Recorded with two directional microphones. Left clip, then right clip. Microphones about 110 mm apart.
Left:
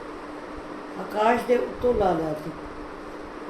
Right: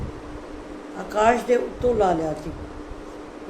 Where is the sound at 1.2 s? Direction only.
15° right (ahead or behind).